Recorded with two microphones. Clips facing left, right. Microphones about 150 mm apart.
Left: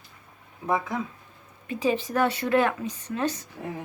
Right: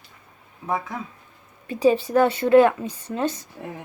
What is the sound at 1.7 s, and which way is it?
Speech, 35° right (ahead or behind).